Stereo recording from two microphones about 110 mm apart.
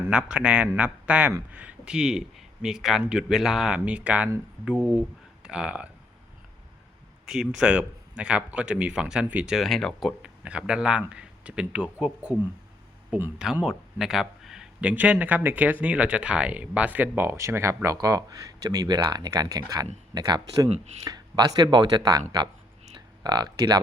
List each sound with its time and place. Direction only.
0.1 s speech: 10° right (ahead or behind)
7.3 s speech: 5° right (ahead or behind)
9.6 s speech: 5° left (ahead or behind)
13.4 s speech: 5° right (ahead or behind); by 23.8 s 40° right (ahead or behind)